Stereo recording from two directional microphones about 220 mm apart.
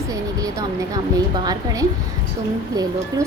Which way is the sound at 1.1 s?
15° right (ahead or behind).